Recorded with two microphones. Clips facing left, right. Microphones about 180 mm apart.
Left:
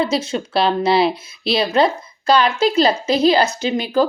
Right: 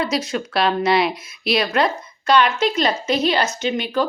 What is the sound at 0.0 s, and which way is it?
Speech, 25° left (ahead or behind).